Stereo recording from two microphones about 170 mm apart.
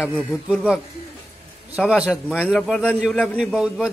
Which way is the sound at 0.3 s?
Centre (ahead or behind).